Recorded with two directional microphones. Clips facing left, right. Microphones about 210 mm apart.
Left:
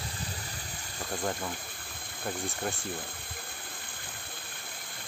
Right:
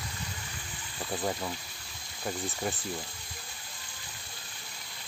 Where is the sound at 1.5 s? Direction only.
55° left (ahead or behind).